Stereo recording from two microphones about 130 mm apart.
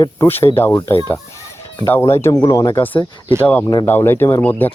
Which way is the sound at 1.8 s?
20° left (ahead or behind).